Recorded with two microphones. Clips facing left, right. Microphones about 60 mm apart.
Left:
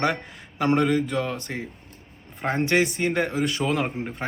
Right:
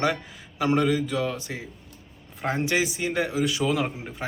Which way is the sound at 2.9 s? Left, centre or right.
Left.